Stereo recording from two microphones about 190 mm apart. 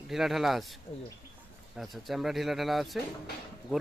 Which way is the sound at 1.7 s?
Centre (ahead or behind).